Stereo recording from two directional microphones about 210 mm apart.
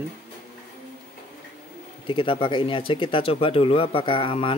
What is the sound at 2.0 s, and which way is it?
Speech, 25° left (ahead or behind).